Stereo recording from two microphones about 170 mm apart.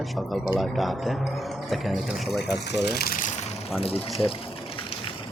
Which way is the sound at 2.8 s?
65° left (ahead or behind).